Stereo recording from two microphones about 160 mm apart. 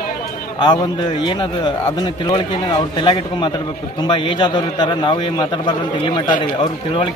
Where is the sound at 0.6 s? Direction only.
30° left (ahead or behind).